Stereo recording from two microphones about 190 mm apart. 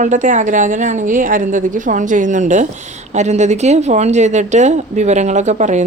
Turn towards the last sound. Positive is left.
turn(degrees=-40)  # may be behind; listen again after turning